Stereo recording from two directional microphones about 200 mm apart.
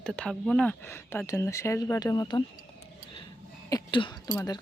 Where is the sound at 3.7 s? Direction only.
25° left (ahead or behind).